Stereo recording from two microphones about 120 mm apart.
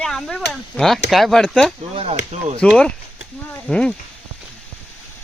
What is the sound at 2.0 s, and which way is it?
Speech, 60° right (ahead or behind).